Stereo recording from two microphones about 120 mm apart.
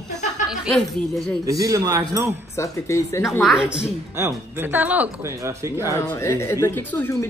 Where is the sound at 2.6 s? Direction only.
25° left (ahead or behind).